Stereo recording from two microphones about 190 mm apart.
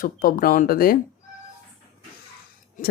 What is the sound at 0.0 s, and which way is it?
Speech, 45° left (ahead or behind).